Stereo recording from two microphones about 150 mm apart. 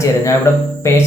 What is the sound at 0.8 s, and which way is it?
Speech, 20° left (ahead or behind).